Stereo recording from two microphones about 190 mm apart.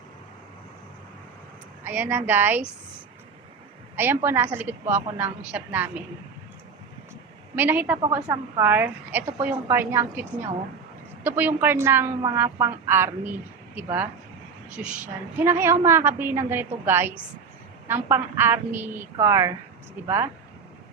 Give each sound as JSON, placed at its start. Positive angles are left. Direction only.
{"t": 1.8, "sound": "a woman's voice", "side_deg": -10}
{"t": 3.9, "sound": "a woman's voice", "side_deg": -10}
{"t": 7.5, "sound": "a woman's voice", "side_deg": -10}